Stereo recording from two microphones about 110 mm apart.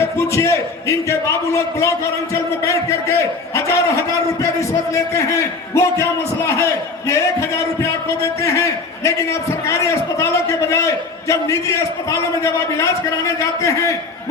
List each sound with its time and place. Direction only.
0.2 s a man's voice: 25° left (ahead or behind)